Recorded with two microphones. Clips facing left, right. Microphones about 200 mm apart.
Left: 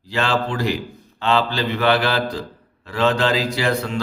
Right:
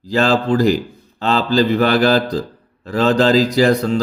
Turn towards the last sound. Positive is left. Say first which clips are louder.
# right 7 dB
turn(degrees=-40)  # may be behind; listen again after turning